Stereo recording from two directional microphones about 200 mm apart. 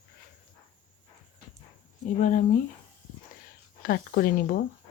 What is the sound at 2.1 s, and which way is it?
Speech, 40° left (ahead or behind).